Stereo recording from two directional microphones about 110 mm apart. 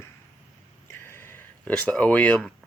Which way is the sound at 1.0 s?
20° left (ahead or behind).